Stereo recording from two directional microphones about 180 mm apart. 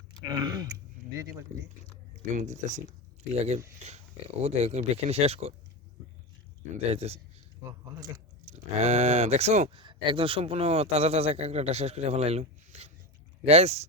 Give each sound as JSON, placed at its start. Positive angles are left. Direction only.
{"t": 0.2, "sound": "chewing", "side_deg": -25}
{"t": 1.1, "sound": "speech", "side_deg": -20}
{"t": 2.3, "sound": "speech", "side_deg": -45}
{"t": 6.7, "sound": "speech", "side_deg": -35}
{"t": 7.7, "sound": "speech", "side_deg": -20}
{"t": 8.4, "sound": "speech", "side_deg": -35}